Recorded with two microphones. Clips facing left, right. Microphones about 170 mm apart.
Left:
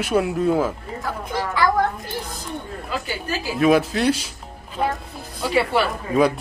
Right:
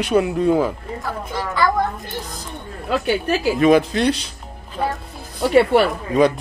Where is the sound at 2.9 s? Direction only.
65° right (ahead or behind).